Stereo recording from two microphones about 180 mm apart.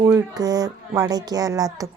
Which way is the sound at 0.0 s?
20° right (ahead or behind).